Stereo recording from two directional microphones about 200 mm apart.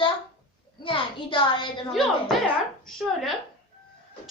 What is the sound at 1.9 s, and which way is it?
A woman's voice, centre (ahead or behind).